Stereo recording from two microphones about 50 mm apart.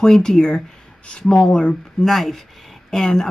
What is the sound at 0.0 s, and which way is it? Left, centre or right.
Speech, centre.